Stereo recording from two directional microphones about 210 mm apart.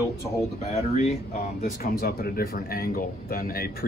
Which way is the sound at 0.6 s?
30° left (ahead or behind).